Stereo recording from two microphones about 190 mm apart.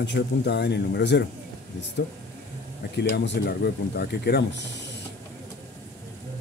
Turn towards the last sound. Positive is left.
turn(degrees=60)  # may be behind; listen again after turning